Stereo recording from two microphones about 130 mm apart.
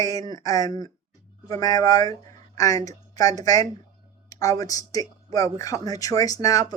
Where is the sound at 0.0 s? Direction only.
30° left (ahead or behind).